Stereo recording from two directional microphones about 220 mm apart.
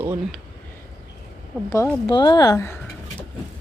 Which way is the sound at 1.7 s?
10° left (ahead or behind).